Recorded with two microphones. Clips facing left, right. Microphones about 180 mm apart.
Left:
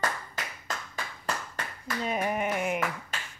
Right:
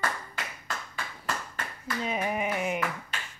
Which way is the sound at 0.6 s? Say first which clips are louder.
Even; 40° left (ahead or behind).